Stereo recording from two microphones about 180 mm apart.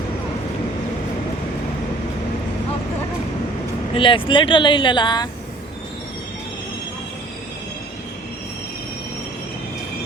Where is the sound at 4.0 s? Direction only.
30° left (ahead or behind).